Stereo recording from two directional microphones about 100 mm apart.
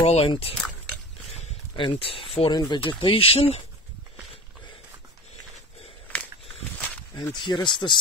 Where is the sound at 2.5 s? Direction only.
50° left (ahead or behind); by 3.6 s 70° left (ahead or behind).